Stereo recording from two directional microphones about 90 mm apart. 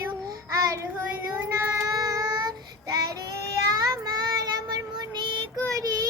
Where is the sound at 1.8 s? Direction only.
40° right (ahead or behind).